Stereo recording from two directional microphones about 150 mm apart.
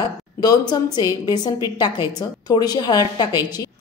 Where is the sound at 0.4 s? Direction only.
25° left (ahead or behind).